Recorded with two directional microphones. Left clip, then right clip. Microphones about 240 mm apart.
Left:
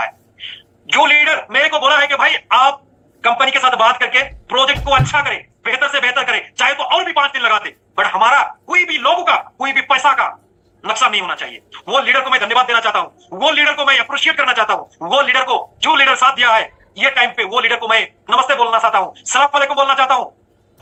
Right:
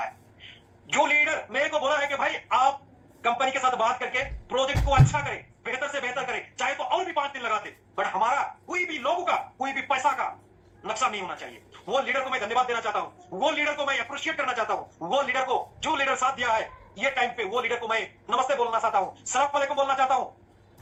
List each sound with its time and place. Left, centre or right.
0.9 s a man's voice: centre